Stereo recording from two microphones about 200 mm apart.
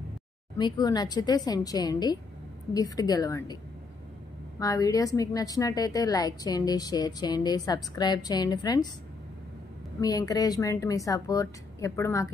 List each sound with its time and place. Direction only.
0.6 s a woman's voice: 20° left (ahead or behind)
4.6 s a woman's voice: 15° left (ahead or behind)
9.9 s speech: 20° left (ahead or behind)